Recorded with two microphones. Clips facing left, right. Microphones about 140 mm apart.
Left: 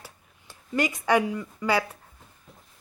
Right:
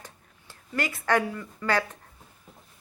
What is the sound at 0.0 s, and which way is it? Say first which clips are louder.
Speech: even; 15° left (ahead or behind).